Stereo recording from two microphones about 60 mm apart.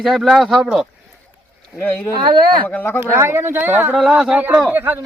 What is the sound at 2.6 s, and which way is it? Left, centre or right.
Speech, left.